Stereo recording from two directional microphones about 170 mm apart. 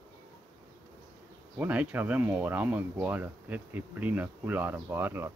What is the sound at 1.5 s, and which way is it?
Speech, 10° right (ahead or behind).